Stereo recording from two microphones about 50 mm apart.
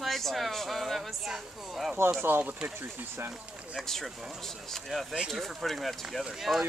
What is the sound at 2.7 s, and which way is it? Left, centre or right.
Speech, right.